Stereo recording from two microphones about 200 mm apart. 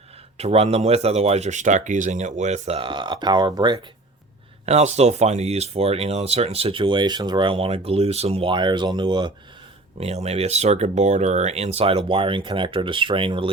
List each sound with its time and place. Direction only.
0.3 s speech: 30° right (ahead or behind)
4.6 s speech: 35° right (ahead or behind)